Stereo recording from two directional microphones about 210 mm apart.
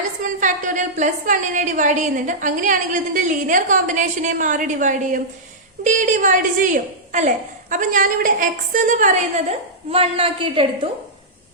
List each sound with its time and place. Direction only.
0.2 s a woman's voice: 40° right (ahead or behind)
9.9 s a woman's voice: 25° right (ahead or behind)